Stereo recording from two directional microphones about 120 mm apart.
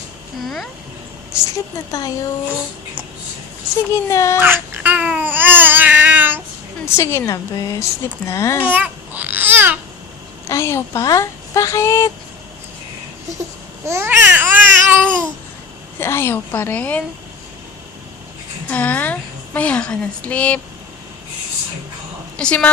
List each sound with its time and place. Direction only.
0.3 s speech: centre (ahead or behind)
1.3 s speech: 30° left (ahead or behind)
3.9 s speech: 25° left (ahead or behind)
4.4 s babbling: 20° right (ahead or behind)
6.8 s speech: 20° left (ahead or behind)
8.6 s babbling: 15° right (ahead or behind)
10.5 s speech: 25° left (ahead or behind)
13.8 s babbling: 20° right (ahead or behind)
16.0 s a woman's voice: 20° left (ahead or behind)
18.7 s a woman's voice: 15° left (ahead or behind)
22.4 s a woman's voice: 10° left (ahead or behind)